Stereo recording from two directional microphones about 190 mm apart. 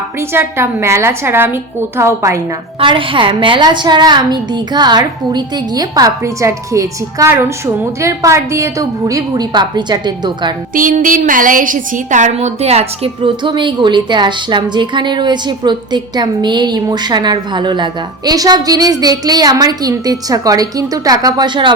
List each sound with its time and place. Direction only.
0.2 s a woman's voice: 15° right (ahead or behind)
2.8 s a woman's voice: 25° right (ahead or behind)
10.8 s a woman's voice: 45° right (ahead or behind); by 21.7 s 25° right (ahead or behind)